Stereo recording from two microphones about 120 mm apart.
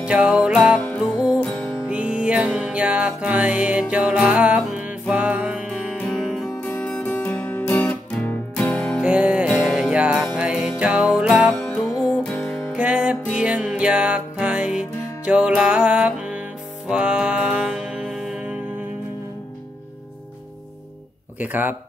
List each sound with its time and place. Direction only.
0.0 s music: 5° right (ahead or behind)
1.4 s music: 10° left (ahead or behind)
1.9 s music: 10° right (ahead or behind)
5.9 s music: centre (ahead or behind)
6.6 s music: 15° left (ahead or behind)
9.0 s music: 10° right (ahead or behind)
12.7 s music: 10° right (ahead or behind)
21.4 s speech: 15° right (ahead or behind)